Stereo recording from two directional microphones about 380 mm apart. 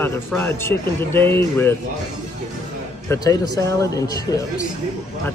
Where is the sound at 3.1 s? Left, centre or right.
Centre.